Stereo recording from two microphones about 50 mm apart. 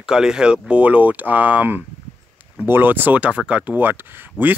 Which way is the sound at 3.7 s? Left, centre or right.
Right.